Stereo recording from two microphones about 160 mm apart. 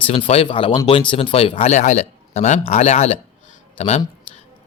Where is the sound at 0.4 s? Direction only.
30° left (ahead or behind).